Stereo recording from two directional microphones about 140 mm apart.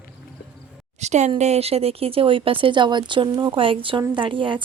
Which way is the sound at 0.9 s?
55° right (ahead or behind).